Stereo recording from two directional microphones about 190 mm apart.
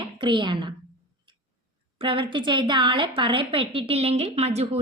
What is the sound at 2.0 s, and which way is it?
A woman's voice, 25° right (ahead or behind).